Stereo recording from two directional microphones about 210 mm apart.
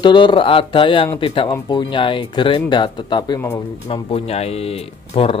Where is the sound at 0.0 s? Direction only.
25° left (ahead or behind).